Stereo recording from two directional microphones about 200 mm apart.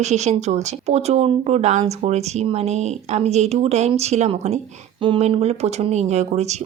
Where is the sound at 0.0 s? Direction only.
35° right (ahead or behind).